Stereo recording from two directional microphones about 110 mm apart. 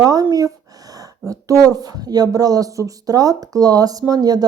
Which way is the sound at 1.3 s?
30° right (ahead or behind).